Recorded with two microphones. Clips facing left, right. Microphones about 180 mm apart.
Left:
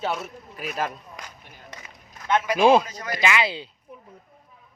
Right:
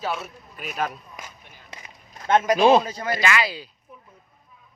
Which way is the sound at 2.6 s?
10° left (ahead or behind).